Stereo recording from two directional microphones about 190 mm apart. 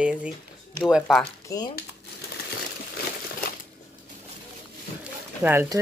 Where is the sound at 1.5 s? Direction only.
20° left (ahead or behind).